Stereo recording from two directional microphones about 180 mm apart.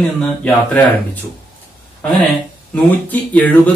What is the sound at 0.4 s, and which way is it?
Speech, 5° left (ahead or behind).